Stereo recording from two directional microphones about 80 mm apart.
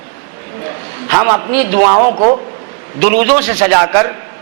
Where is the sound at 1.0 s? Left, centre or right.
Right.